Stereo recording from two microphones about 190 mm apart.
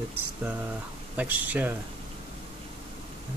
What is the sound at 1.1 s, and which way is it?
Speech, 10° right (ahead or behind).